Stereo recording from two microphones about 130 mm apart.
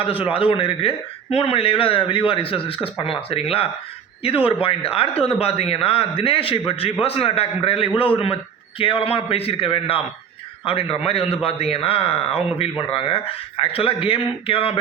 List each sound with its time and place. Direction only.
0.0 s a man's voice: 45° left (ahead or behind)